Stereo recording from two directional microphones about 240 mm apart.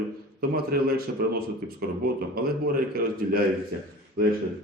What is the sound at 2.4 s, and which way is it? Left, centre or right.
Speech, right.